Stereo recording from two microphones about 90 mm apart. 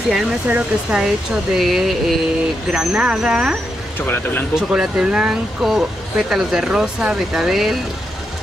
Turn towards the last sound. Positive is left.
turn(degrees=-5)  # may be behind; listen again after turning